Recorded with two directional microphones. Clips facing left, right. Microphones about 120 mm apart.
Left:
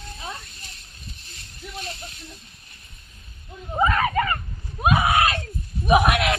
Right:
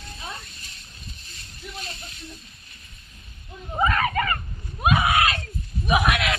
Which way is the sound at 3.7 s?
15° left (ahead or behind).